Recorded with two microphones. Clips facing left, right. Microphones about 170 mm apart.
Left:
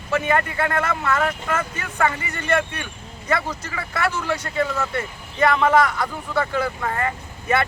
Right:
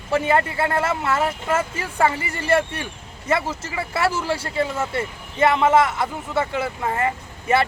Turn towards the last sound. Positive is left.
turn(degrees=-25)  # may be behind; listen again after turning